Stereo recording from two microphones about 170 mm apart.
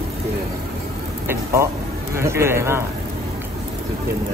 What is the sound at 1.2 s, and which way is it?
Speech, 15° right (ahead or behind).